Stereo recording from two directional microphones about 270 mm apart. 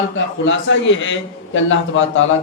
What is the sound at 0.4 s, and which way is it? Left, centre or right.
A man's voice, left.